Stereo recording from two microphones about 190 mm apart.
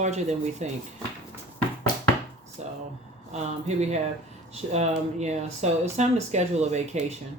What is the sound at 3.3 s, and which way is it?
Speech, 35° right (ahead or behind).